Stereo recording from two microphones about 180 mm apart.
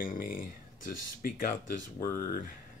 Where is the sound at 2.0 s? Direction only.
15° left (ahead or behind).